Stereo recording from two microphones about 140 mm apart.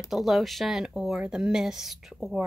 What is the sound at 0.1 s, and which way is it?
A woman's voice, centre (ahead or behind).